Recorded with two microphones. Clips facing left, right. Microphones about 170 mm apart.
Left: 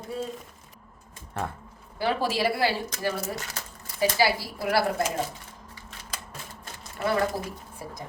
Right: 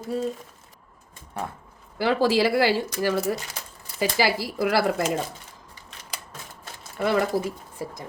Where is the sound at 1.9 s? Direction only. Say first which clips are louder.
Right 6 dB; 90° right.